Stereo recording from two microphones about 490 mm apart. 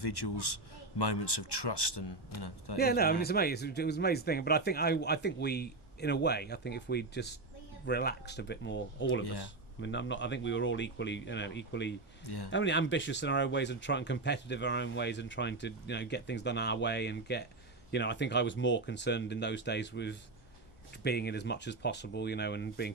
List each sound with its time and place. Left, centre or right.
0.0 s speech: left
2.7 s speech: centre
9.2 s speech: left
9.8 s speech: left